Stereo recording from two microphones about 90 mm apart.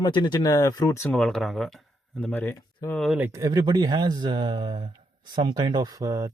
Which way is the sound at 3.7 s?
50° right (ahead or behind).